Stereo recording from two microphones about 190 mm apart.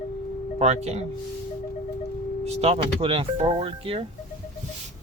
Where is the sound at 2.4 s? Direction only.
35° right (ahead or behind).